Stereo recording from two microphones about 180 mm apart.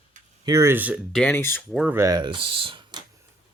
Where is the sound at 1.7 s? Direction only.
10° right (ahead or behind); by 3.0 s 25° right (ahead or behind).